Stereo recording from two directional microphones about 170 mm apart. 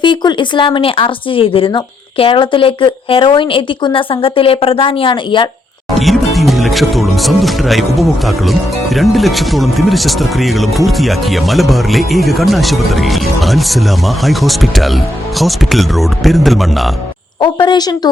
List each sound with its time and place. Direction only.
0.0 s speech: 25° left (ahead or behind)
6.0 s speech: centre (ahead or behind)
17.4 s speech: 25° left (ahead or behind)